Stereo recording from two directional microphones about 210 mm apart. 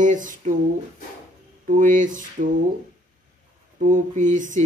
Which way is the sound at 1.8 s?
40° right (ahead or behind).